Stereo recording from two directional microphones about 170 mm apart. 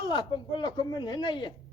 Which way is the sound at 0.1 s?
25° left (ahead or behind).